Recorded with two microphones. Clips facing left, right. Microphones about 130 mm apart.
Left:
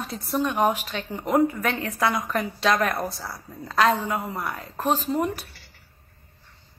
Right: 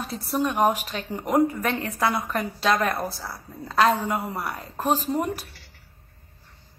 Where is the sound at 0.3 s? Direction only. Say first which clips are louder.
Right 1 dB; 10° right (ahead or behind).